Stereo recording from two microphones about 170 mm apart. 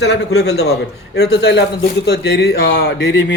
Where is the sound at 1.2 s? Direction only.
90° left.